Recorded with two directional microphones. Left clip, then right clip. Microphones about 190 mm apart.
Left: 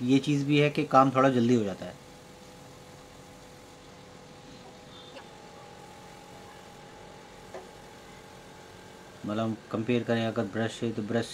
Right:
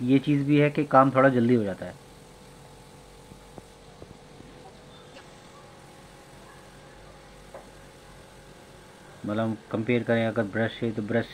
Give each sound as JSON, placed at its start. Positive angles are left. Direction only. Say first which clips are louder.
{"t": 0.1, "sound": "speech", "louder": "right 3 dB", "side_deg": 5}
{"t": 9.3, "sound": "speech", "louder": "right 3 dB", "side_deg": 5}